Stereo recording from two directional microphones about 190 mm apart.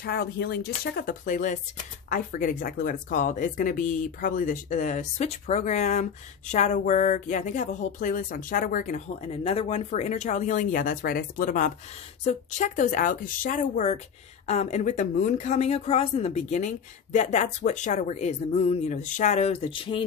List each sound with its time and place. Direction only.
0.0 s speech: 60° left (ahead or behind); by 20.1 s 25° left (ahead or behind)